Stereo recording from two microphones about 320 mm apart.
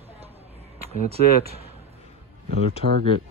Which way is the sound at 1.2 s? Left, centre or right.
Left.